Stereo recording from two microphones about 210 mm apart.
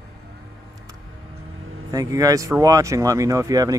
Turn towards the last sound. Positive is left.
turn(degrees=-15)  # may be behind; listen again after turning